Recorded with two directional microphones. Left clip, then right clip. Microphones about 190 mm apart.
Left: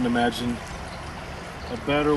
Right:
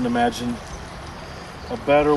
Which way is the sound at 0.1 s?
15° right (ahead or behind).